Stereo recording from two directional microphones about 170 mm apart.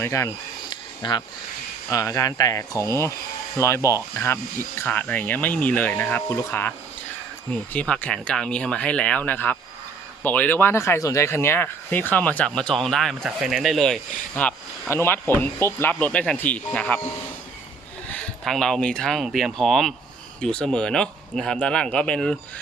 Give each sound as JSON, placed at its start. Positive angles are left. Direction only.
{"t": 0.0, "sound": "a sound", "side_deg": 15}
{"t": 1.9, "sound": "speech", "side_deg": 20}
{"t": 18.1, "sound": "speech", "side_deg": 5}